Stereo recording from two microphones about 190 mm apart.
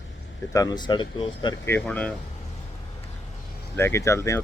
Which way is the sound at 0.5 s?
20° left (ahead or behind).